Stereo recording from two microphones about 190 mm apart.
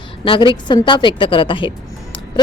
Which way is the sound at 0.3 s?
25° left (ahead or behind).